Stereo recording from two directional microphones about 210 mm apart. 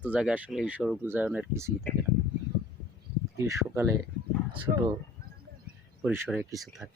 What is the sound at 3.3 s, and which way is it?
Speech, 15° right (ahead or behind).